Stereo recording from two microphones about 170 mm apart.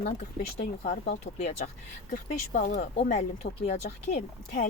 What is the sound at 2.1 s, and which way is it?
Speech, 45° left (ahead or behind).